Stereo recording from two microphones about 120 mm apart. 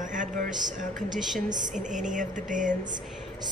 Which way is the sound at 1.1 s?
Centre (ahead or behind).